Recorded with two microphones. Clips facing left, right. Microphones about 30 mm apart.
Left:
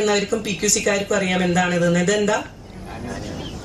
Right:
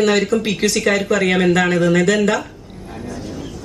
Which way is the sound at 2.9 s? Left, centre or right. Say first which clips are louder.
Right 2 dB; centre.